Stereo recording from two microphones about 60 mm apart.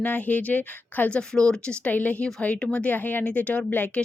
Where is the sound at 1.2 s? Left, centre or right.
Centre.